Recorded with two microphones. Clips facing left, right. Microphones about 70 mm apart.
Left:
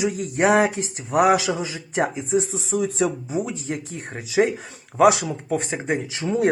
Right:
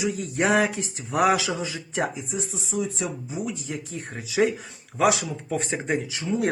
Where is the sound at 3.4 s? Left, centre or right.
Left.